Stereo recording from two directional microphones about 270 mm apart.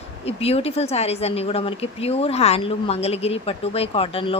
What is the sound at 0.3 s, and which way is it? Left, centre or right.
Speech, left.